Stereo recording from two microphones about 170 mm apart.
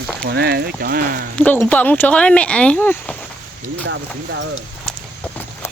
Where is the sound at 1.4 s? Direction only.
5° left (ahead or behind).